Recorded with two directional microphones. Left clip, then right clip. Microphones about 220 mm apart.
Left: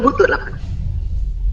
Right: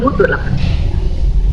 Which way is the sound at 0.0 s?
45° left (ahead or behind).